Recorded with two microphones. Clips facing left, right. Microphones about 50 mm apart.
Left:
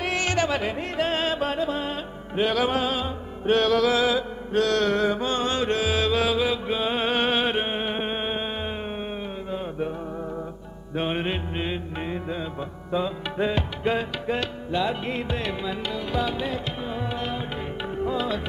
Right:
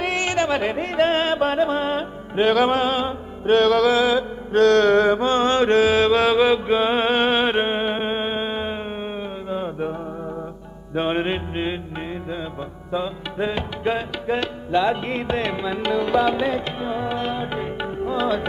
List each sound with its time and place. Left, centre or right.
0.0 s music: right
4.6 s mantra: right
7.0 s music: right
7.5 s a sound: right
7.9 s music: centre
9.5 s mantra: right
11.0 s mantra: right
12.1 s music: centre
14.2 s music: centre
14.7 s music: right
15.8 s music: right
16.9 s music: right